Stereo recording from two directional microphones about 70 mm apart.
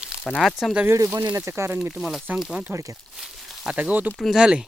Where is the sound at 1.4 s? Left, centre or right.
Right.